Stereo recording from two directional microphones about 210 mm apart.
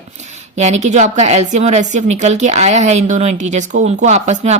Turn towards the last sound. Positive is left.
turn(degrees=-35)  # may be behind; listen again after turning